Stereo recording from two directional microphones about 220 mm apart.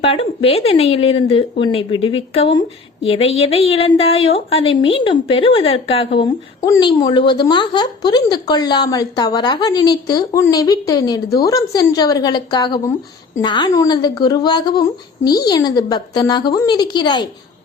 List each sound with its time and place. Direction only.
0.0 s a woman's voice: 25° left (ahead or behind)